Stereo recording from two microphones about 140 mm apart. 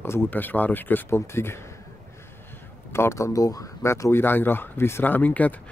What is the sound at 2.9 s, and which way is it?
Speech, 20° left (ahead or behind).